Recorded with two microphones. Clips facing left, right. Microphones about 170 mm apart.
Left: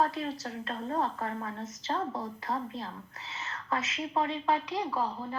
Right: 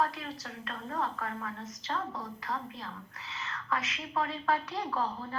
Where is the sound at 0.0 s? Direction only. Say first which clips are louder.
Left 3 dB; 30° left (ahead or behind).